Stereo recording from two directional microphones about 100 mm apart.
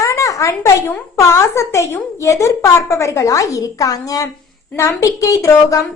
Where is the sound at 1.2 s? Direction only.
30° left (ahead or behind).